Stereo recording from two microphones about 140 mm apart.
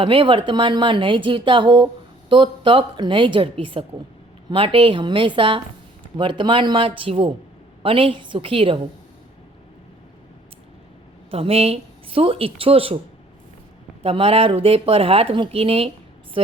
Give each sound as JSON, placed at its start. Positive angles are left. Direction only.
{"t": 0.0, "sound": "speech", "side_deg": -40}
{"t": 11.3, "sound": "a woman's voice", "side_deg": -45}
{"t": 14.0, "sound": "speech", "side_deg": -40}